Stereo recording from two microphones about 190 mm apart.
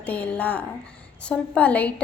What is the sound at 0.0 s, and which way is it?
A woman's voice, 5° left (ahead or behind).